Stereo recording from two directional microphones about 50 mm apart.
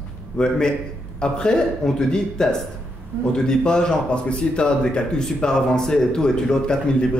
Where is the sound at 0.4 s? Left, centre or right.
Centre.